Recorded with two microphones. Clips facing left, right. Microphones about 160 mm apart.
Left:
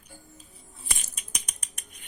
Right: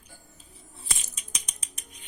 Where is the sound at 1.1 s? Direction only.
55° left (ahead or behind).